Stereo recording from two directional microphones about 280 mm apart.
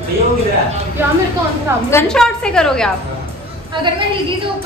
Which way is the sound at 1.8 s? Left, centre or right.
Centre.